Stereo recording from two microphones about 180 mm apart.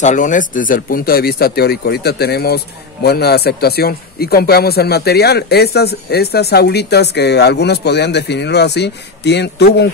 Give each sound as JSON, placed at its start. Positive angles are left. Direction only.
{"t": 0.0, "sound": "speech", "side_deg": 45}